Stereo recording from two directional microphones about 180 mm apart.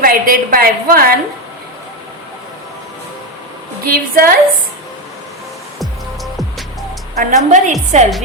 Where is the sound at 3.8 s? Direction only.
55° right (ahead or behind).